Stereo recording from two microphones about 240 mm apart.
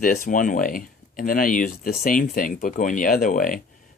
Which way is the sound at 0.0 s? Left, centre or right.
Left.